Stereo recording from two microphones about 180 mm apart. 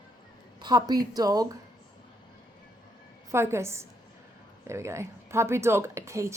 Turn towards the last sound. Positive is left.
turn(degrees=-15)  # may be behind; listen again after turning